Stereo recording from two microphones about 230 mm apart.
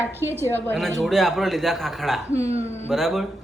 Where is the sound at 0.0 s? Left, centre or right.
Centre.